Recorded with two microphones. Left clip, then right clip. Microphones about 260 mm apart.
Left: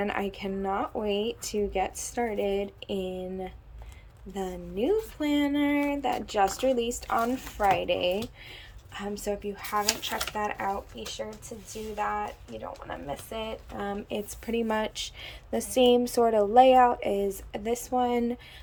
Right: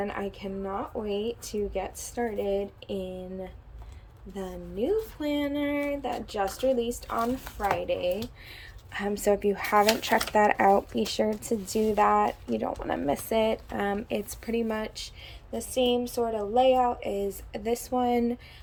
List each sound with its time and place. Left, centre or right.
0.0 s speech: centre
8.9 s speech: centre
10.9 s speech: right
11.2 s speech: right; by 18.3 s centre